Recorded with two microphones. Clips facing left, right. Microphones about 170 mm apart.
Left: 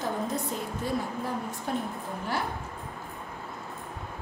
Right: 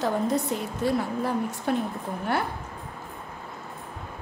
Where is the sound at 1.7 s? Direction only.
75° right (ahead or behind).